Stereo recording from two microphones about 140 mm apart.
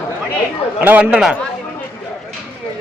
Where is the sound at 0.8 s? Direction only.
10° right (ahead or behind).